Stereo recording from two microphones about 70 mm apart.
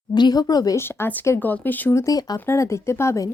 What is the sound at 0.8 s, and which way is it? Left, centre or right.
A woman's voice, left.